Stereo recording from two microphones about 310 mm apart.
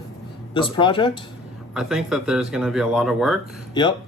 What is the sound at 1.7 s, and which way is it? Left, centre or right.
Speech, centre.